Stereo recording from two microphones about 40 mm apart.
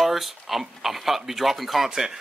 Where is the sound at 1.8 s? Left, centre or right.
Centre.